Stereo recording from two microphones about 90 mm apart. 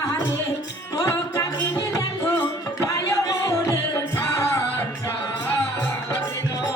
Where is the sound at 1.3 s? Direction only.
40° left (ahead or behind).